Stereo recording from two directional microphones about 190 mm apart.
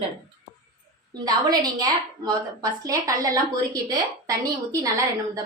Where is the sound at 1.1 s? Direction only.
20° right (ahead or behind).